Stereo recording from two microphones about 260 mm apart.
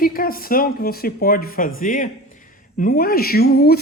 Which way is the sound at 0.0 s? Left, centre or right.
Left.